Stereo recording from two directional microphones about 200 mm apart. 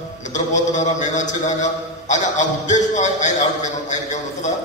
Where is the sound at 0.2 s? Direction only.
35° left (ahead or behind).